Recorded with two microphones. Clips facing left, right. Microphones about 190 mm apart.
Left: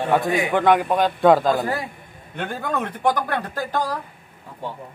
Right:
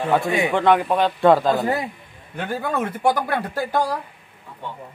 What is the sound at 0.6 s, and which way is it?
A man's voice, 5° left (ahead or behind).